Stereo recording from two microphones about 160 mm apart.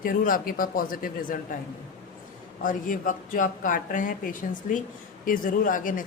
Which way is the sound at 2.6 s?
55° left (ahead or behind).